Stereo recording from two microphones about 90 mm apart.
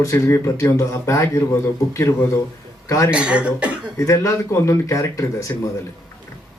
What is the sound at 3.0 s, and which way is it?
Speech, 10° right (ahead or behind).